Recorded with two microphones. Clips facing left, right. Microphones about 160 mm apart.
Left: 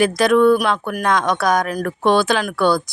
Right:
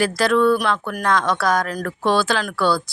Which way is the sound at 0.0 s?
20° left (ahead or behind).